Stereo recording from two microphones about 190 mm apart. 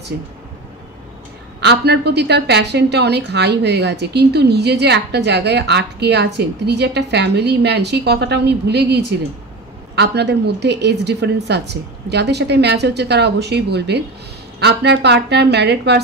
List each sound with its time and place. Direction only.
1.6 s a woman's voice: 60° right (ahead or behind)